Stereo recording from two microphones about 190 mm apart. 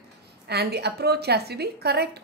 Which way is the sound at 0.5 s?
60° right (ahead or behind).